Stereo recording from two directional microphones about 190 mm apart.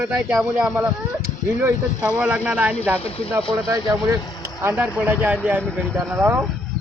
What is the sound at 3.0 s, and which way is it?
Speech, 30° left (ahead or behind).